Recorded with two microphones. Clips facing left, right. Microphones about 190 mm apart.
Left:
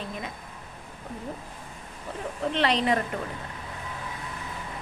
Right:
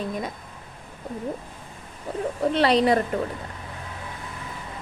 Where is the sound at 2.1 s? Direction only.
40° right (ahead or behind).